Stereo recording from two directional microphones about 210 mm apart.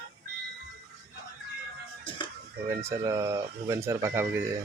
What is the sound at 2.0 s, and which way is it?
Music, 25° left (ahead or behind).